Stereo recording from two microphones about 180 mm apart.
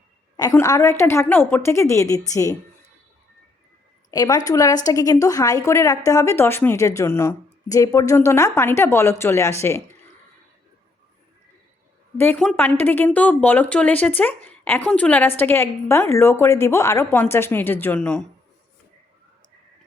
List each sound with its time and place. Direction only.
0.5 s a woman's voice: 15° left (ahead or behind)
4.1 s a woman's voice: 20° left (ahead or behind)
12.1 s a woman's voice: 10° left (ahead or behind)